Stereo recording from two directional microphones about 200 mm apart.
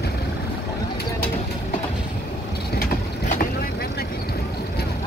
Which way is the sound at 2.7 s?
45° left (ahead or behind).